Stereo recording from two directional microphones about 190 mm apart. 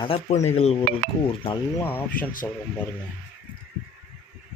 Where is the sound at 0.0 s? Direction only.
30° left (ahead or behind).